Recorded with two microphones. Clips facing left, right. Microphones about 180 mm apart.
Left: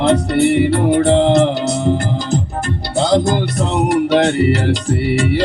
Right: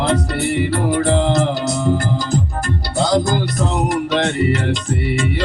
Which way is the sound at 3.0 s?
25° left (ahead or behind).